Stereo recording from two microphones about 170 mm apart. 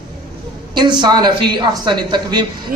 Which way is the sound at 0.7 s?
25° right (ahead or behind).